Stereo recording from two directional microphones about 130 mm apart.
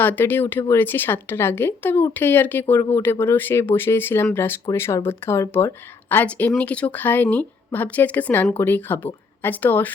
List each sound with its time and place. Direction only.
0.0 s a woman's voice: 15° left (ahead or behind)